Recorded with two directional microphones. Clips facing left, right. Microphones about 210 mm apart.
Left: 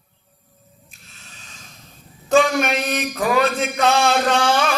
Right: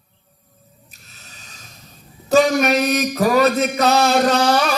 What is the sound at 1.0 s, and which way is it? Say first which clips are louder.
Snort: even; 40° right (ahead or behind).